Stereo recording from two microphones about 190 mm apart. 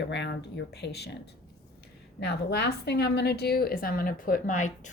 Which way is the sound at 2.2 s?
60° left (ahead or behind).